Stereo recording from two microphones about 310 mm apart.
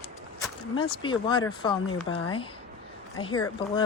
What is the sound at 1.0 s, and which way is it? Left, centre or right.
Speech, centre.